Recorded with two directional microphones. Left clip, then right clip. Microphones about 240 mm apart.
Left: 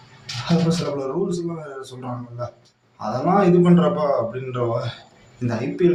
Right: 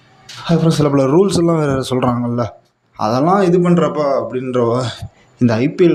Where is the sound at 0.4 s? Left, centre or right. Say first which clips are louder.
Right 8 dB; right.